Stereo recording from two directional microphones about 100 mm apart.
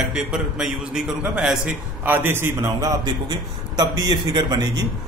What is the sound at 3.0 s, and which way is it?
A man's voice, 40° right (ahead or behind).